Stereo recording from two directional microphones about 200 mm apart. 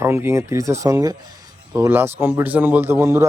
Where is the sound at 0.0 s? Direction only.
10° right (ahead or behind).